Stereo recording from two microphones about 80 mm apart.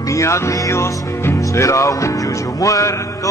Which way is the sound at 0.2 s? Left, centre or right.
Left.